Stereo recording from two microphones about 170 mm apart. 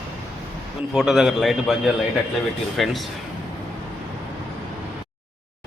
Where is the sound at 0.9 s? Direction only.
5° right (ahead or behind).